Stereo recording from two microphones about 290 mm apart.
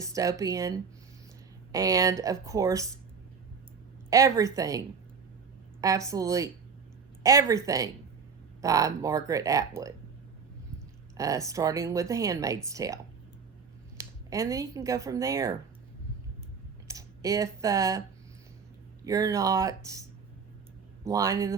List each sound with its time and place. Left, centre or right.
0.0 s speech: centre
4.1 s speech: centre
5.8 s speech: centre
11.2 s speech: centre
14.0 s speech: centre
16.9 s speech: centre
19.0 s speech: centre